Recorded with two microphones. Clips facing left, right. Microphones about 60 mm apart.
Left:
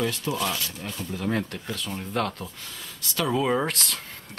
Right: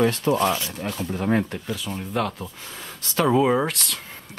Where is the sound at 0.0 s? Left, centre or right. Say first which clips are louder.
Right 7 dB; right.